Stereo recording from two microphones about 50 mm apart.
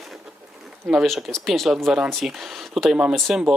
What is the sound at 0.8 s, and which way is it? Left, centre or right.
Speech, centre.